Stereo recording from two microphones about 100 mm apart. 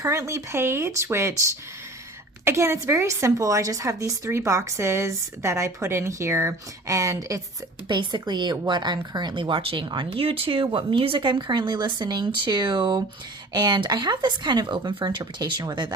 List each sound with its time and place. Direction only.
0.0 s a woman's voice: 30° right (ahead or behind)
7.9 s speech: 50° right (ahead or behind)
10.1 s speech: 70° right (ahead or behind); by 16.0 s 50° right (ahead or behind)